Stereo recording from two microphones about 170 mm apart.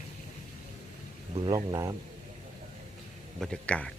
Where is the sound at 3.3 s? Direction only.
5° left (ahead or behind).